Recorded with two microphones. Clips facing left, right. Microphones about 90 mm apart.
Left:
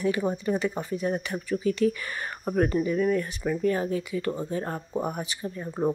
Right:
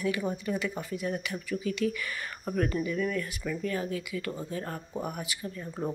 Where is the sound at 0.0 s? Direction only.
30° left (ahead or behind).